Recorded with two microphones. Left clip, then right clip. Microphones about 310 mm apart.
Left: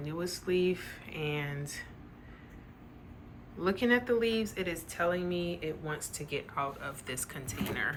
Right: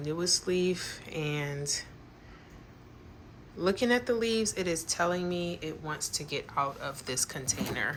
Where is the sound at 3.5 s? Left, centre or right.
Centre.